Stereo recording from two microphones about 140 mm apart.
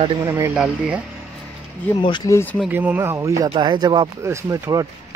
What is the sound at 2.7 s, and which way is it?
Speech, 10° right (ahead or behind).